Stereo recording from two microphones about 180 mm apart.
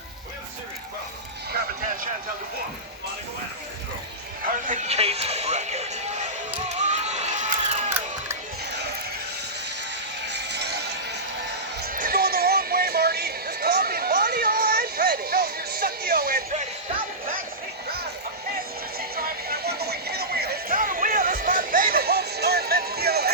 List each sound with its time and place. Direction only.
4.4 s music: 45° right (ahead or behind)
6.8 s crowd: 40° right (ahead or behind)
10.2 s music: 70° right (ahead or behind)
11.8 s music: 55° right (ahead or behind)
18.9 s music: 60° right (ahead or behind)